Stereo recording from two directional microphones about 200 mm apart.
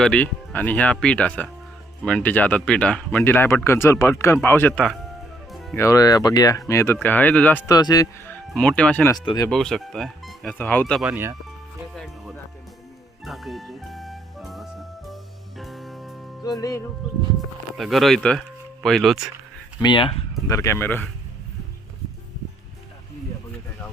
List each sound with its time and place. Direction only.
0.0 s speech: 5° left (ahead or behind)
5.5 s music: centre (ahead or behind)
5.7 s speech: 15° left (ahead or behind)
7.8 s speech: 20° left (ahead or behind)
8.3 s speech: 5° left (ahead or behind)
9.1 s speech: 20° left (ahead or behind)
9.5 s speech: centre (ahead or behind)
11.1 s speech: 15° right (ahead or behind)
11.9 s music: centre (ahead or behind)
16.4 s speech: 15° left (ahead or behind)
17.7 s speech: centre (ahead or behind)
19.8 s speech: 25° left (ahead or behind)
20.6 s speech: 10° left (ahead or behind)